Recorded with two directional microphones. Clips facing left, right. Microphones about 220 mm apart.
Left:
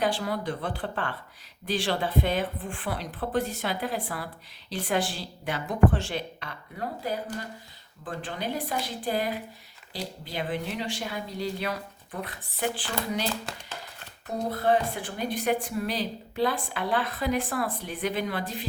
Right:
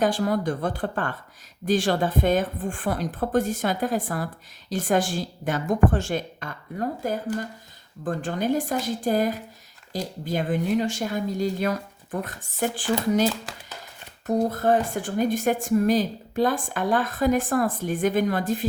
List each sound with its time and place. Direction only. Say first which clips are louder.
0.0 s a woman's voice: right 5 dB; 45° right (ahead or behind)
14.3 s a woman's voice: right 4 dB; 45° right (ahead or behind)